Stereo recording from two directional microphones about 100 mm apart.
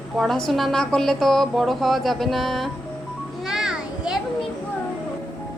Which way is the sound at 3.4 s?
5° right (ahead or behind).